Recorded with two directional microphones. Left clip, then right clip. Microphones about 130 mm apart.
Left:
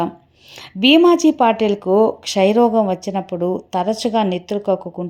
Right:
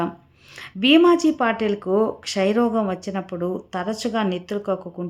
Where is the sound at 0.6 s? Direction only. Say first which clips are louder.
Left 4 dB; 30° left (ahead or behind).